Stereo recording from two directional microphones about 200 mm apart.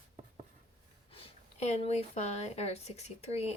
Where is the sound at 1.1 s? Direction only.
30° left (ahead or behind).